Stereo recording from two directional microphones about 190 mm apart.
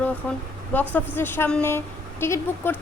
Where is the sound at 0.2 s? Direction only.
5° left (ahead or behind).